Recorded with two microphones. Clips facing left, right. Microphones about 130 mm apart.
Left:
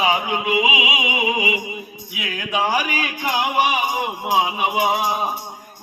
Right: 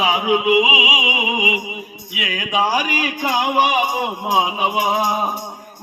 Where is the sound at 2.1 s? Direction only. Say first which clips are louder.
Right 3 dB; 90° right.